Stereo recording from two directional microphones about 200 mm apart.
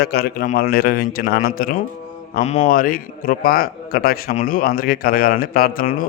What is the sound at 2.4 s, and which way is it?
A man's voice, 30° left (ahead or behind).